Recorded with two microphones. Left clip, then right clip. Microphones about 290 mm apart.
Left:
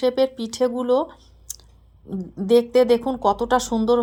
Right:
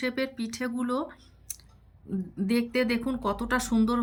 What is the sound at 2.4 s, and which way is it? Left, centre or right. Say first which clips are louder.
Speech: left 12 dB; left.